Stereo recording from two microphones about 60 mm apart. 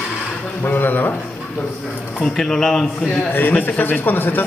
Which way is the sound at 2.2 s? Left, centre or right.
Centre.